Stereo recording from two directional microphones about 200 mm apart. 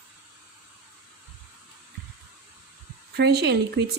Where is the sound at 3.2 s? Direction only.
55° right (ahead or behind).